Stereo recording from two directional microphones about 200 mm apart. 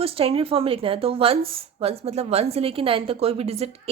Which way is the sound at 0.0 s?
30° right (ahead or behind).